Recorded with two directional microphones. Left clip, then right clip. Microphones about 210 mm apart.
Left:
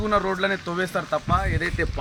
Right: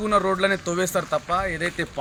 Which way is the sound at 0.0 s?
50° right (ahead or behind).